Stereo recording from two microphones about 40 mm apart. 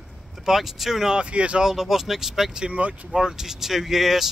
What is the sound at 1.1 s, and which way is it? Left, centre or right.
Speech, right.